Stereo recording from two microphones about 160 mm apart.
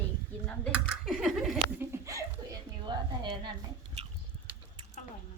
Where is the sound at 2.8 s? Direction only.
30° right (ahead or behind).